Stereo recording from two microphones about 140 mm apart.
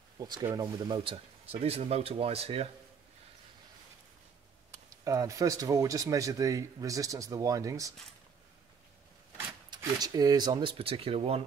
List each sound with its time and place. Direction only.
0.2 s speech: 30° right (ahead or behind); by 2.7 s 45° right (ahead or behind)
4.6 s speech: 25° right (ahead or behind)
9.9 s speech: 25° right (ahead or behind); by 11.4 s 45° right (ahead or behind)